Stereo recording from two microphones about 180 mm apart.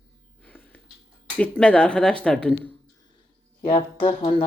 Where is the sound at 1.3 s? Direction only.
5° left (ahead or behind).